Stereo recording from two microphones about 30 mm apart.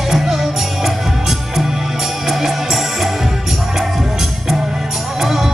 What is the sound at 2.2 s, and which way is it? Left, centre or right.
Music, centre.